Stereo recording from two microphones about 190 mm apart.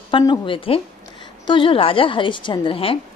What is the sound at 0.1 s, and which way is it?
A woman's voice, 25° left (ahead or behind).